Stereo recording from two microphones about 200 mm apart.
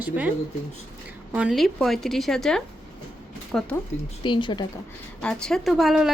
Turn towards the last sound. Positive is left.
turn(degrees=0)  # may be behind; listen again after turning